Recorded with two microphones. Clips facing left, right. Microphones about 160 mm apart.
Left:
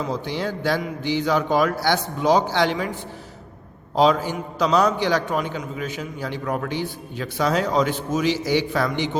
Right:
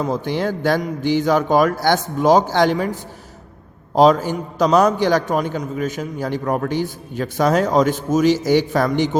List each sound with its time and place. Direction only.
0.0 s a man's voice: 50° right (ahead or behind)